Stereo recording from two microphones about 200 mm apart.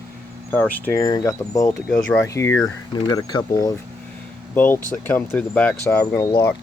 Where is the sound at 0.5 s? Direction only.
15° left (ahead or behind).